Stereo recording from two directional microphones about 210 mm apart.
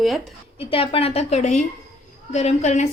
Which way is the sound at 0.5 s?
25° left (ahead or behind).